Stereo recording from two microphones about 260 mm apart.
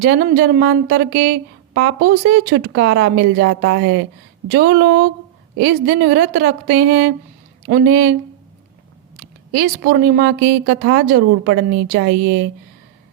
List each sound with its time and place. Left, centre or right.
0.0 s a woman's voice: right
9.5 s a woman's voice: right